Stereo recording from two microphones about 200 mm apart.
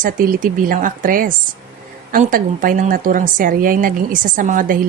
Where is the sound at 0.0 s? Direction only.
45° right (ahead or behind).